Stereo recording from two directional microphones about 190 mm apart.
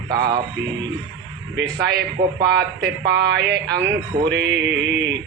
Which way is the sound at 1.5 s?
60° right (ahead or behind).